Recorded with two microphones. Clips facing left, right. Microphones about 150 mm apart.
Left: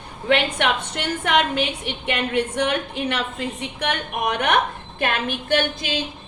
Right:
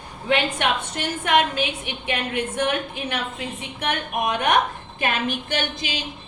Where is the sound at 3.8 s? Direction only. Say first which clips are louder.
Even; 65° left (ahead or behind).